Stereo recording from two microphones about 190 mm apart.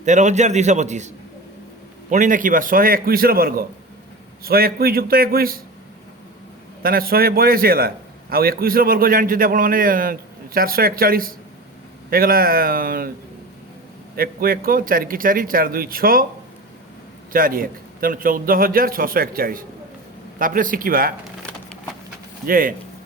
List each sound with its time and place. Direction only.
0.0 s a man's voice: 40° right (ahead or behind)
6.8 s a man's voice: 50° right (ahead or behind)
14.2 s a man's voice: 50° right (ahead or behind)
17.3 s a man's voice: 50° right (ahead or behind)
22.4 s a man's voice: 45° right (ahead or behind)